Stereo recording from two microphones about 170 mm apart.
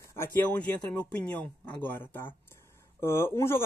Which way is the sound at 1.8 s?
15° left (ahead or behind).